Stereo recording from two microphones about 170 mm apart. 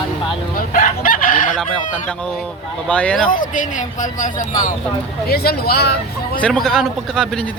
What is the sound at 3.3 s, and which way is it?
Speech, 50° left (ahead or behind).